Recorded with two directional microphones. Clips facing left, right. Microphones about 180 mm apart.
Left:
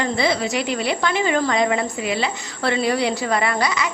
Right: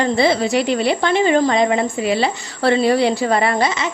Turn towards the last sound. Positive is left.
turn(degrees=-25)  # may be behind; listen again after turning